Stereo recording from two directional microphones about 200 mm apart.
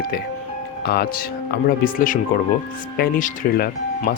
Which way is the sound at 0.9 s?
50° left (ahead or behind).